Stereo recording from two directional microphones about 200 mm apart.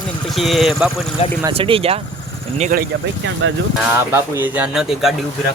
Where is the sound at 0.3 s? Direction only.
Centre (ahead or behind).